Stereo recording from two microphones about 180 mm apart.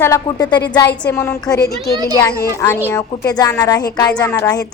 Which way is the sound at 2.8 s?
15° left (ahead or behind).